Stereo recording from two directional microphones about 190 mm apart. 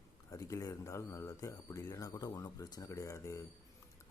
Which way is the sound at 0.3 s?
15° left (ahead or behind).